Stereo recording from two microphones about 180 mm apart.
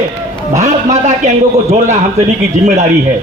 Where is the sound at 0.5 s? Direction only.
40° right (ahead or behind).